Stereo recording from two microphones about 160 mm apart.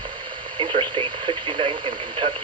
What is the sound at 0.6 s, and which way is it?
Speech, 30° right (ahead or behind).